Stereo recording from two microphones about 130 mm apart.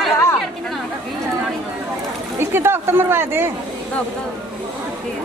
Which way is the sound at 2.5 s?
20° right (ahead or behind).